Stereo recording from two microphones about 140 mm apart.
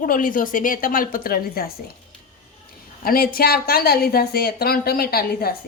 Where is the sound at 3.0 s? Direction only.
90° left.